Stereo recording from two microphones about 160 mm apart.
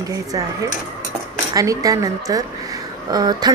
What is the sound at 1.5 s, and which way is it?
A woman's voice, 20° right (ahead or behind).